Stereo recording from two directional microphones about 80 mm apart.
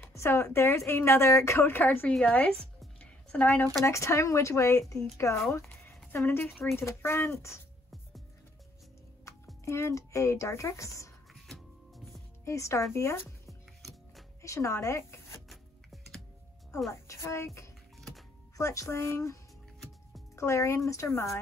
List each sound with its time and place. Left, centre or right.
0.1 s a woman's voice: left; by 2.5 s centre
3.0 s music: centre
3.8 s a woman's voice: left
5.5 s a sound: left
6.1 s speech: left
9.7 s a woman's voice: left
11.4 s music: centre
12.4 s a woman's voice: left
14.4 s speech: left
15.5 s a sound: centre
17.1 s a woman's voice: left
18.6 s a woman's voice: left
20.3 s a woman's voice: left